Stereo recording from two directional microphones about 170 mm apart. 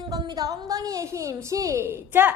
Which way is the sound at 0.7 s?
20° right (ahead or behind).